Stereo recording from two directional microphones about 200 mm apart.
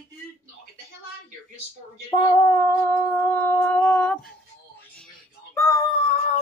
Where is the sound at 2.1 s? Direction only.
20° left (ahead or behind).